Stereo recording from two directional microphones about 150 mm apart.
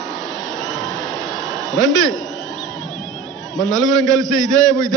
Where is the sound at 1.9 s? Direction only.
Centre (ahead or behind).